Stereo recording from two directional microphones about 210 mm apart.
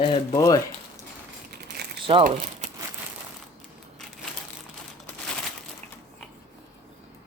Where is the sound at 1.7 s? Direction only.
50° right (ahead or behind).